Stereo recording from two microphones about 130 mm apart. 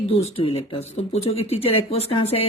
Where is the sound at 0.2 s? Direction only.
50° left (ahead or behind).